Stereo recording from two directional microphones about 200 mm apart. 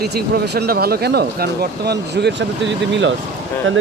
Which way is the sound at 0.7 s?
50° right (ahead or behind).